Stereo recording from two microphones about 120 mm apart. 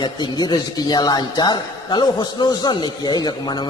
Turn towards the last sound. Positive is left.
turn(degrees=35)  # may be behind; listen again after turning